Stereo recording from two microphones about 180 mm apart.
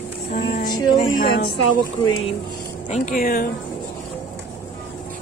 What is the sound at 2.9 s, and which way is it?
Speech, 50° left (ahead or behind).